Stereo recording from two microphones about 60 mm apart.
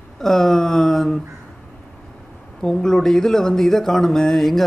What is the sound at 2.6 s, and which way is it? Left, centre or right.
Speech, centre.